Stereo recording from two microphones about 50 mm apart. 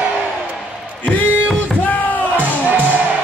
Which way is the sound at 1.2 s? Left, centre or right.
Left.